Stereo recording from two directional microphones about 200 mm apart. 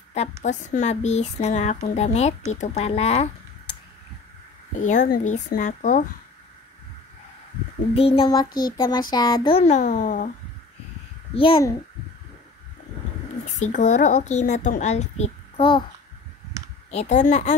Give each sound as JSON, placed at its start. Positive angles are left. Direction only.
{"t": 0.4, "sound": "speech", "side_deg": 35}
{"t": 4.7, "sound": "speech", "side_deg": 40}
{"t": 7.9, "sound": "child singing", "side_deg": 30}
{"t": 9.1, "sound": "speech", "side_deg": 20}
{"t": 11.3, "sound": "child singing", "side_deg": 25}
{"t": 13.6, "sound": "speech", "side_deg": 40}
{"t": 16.9, "sound": "speech", "side_deg": 35}